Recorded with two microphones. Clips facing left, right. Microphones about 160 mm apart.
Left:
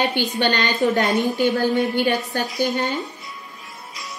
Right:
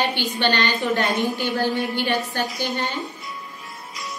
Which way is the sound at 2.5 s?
45° left (ahead or behind).